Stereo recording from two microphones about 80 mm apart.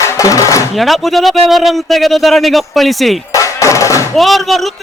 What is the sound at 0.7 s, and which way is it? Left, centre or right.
Speech, centre.